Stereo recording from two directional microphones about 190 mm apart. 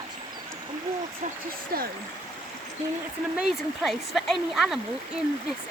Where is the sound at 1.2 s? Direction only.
40° right (ahead or behind).